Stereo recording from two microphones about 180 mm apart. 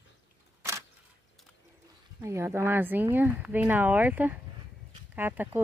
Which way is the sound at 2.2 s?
15° right (ahead or behind).